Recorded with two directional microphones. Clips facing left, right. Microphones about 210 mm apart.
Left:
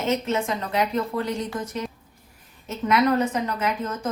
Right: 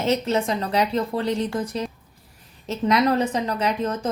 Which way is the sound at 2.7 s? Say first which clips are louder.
Right 1 dB; 35° right (ahead or behind).